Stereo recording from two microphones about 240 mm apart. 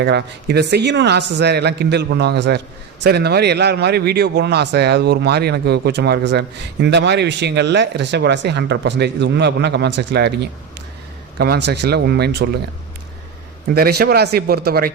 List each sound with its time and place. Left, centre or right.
0.0 s a man's voice: right
13.7 s speech: right